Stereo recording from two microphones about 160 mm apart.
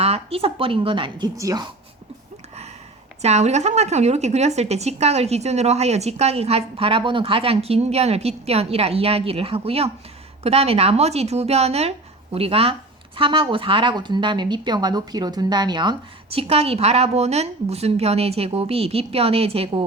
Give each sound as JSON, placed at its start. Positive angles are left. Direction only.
{"t": 0.0, "sound": "a woman's voice", "side_deg": -40}
{"t": 3.2, "sound": "a woman's voice", "side_deg": -45}